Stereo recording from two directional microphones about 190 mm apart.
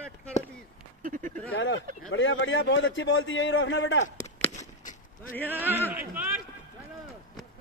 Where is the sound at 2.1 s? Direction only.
85° left.